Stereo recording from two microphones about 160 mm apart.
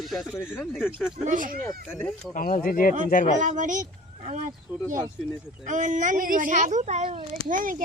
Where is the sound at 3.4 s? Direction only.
50° right (ahead or behind).